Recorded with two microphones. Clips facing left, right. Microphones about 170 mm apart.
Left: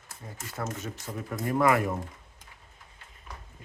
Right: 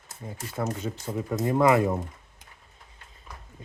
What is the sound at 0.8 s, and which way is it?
Speech, 25° right (ahead or behind).